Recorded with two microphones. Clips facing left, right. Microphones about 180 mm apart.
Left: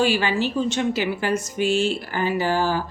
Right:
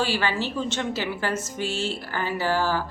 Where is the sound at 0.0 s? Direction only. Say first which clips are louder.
Left 5 dB; 15° left (ahead or behind).